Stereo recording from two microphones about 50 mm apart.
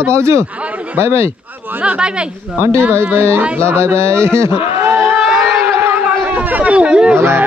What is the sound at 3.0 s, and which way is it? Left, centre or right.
Speech, right.